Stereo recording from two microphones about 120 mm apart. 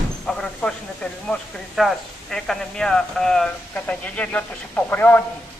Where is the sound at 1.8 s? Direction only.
Centre (ahead or behind); by 5.2 s 15° left (ahead or behind).